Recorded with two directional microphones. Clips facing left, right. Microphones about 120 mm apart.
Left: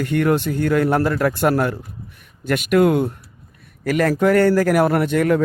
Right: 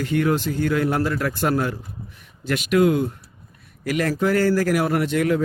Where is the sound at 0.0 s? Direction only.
60° left (ahead or behind).